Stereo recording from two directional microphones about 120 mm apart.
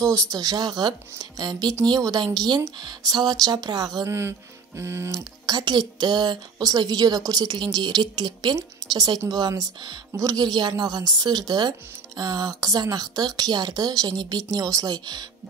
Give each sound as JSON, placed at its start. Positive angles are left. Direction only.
{"t": 0.1, "sound": "a woman's voice", "side_deg": -30}
{"t": 5.5, "sound": "a woman's voice", "side_deg": -35}